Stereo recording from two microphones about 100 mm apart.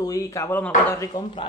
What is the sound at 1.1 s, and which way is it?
Speech, 50° left (ahead or behind).